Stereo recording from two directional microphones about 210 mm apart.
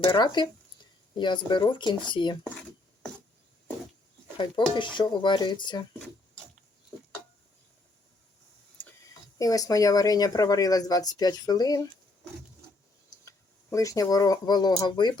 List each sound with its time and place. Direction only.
0.0 s speech: 20° left (ahead or behind)
4.7 s speech: 20° left (ahead or behind)
9.4 s speech: 15° left (ahead or behind)
13.2 s speech: 15° left (ahead or behind)